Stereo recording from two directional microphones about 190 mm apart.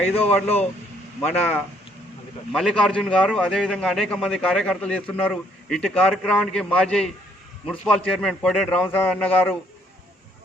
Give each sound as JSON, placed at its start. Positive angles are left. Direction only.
{"t": 0.1, "sound": "a man's voice", "side_deg": 10}